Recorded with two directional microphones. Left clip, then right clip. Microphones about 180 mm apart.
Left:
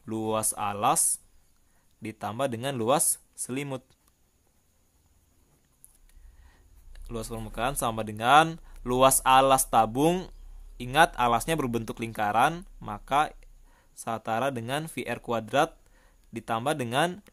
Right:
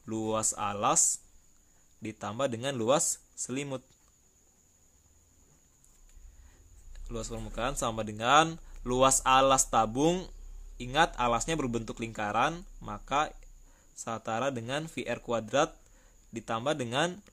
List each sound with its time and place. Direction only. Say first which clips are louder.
0.0 s speech: left 2 dB; 20° left (ahead or behind)
6.5 s speech: left 2 dB; 25° left (ahead or behind)